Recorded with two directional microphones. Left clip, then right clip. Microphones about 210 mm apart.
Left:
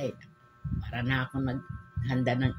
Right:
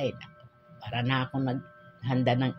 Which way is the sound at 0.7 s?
15° left (ahead or behind).